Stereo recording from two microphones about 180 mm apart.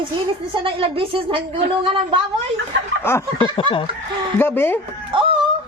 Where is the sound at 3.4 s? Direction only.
30° left (ahead or behind).